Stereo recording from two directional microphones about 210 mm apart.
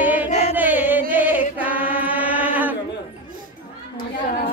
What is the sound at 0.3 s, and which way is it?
Chant, 30° left (ahead or behind).